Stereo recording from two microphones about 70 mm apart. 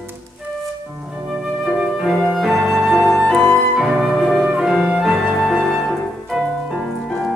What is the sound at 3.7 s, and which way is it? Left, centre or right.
Music, centre.